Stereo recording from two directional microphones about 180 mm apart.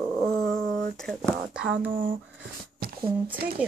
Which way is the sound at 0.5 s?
20° left (ahead or behind).